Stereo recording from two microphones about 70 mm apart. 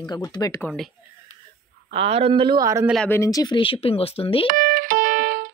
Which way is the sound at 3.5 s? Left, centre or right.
Left.